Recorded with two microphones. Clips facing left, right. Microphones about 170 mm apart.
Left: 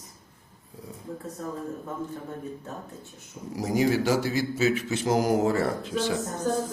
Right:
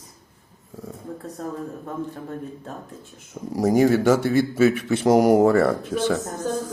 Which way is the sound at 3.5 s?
50° right (ahead or behind).